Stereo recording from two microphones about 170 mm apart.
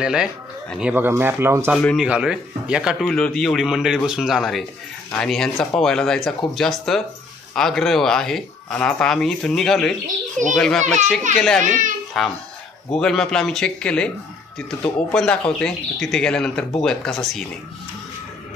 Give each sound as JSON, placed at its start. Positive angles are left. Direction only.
{"t": 0.0, "sound": "a man's voice", "side_deg": -5}
{"t": 1.8, "sound": "a man's voice", "side_deg": 5}
{"t": 2.0, "sound": "a man's voice", "side_deg": -5}
{"t": 10.8, "sound": "a child's voice", "side_deg": -45}
{"t": 11.3, "sound": "a man's voice", "side_deg": 5}